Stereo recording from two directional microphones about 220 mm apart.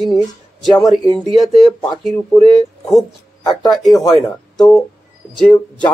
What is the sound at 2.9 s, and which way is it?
Speech, centre (ahead or behind).